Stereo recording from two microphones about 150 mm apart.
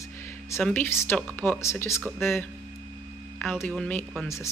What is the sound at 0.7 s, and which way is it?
A woman's voice, 15° left (ahead or behind).